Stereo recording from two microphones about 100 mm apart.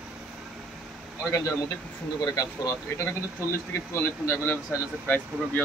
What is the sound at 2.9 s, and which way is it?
Speech, 25° left (ahead or behind).